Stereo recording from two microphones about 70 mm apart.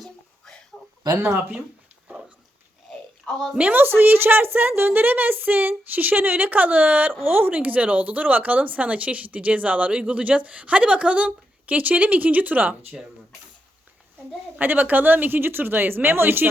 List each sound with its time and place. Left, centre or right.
0.0 s a sound: centre
1.2 s speech: right
3.2 s a woman's voice: centre
3.6 s speech: right
14.6 s speech: right